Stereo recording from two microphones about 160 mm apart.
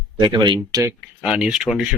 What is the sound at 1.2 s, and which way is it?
Speech, 5° right (ahead or behind).